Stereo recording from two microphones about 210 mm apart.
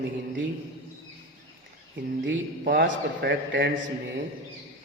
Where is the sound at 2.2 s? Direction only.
60° right (ahead or behind).